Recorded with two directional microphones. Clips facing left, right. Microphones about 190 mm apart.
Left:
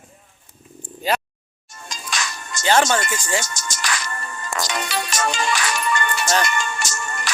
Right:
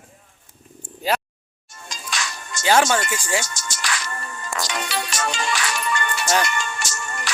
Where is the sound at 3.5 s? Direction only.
45° left (ahead or behind).